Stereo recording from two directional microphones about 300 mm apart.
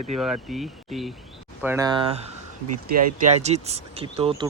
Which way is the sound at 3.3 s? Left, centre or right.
Right.